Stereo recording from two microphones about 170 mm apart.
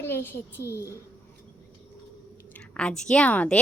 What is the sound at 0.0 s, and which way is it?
Speech, 15° left (ahead or behind).